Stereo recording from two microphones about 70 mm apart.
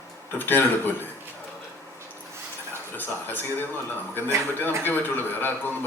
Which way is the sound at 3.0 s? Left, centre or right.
Left.